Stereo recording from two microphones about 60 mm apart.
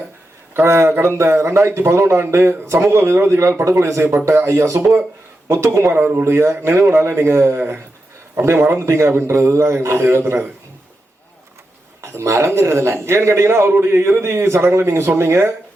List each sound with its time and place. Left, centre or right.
0.5 s speech: right
6.0 s speech: right
6.2 s speech: right
12.0 s speech: right